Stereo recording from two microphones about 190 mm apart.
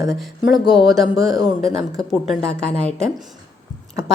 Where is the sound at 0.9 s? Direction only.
Centre (ahead or behind).